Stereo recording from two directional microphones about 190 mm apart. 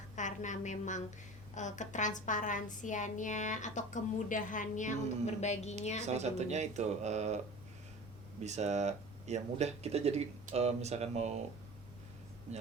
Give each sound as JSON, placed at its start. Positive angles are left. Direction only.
{"t": 0.2, "sound": "a woman's voice", "side_deg": 40}
{"t": 6.1, "sound": "speech", "side_deg": -35}
{"t": 8.4, "sound": "speech", "side_deg": -35}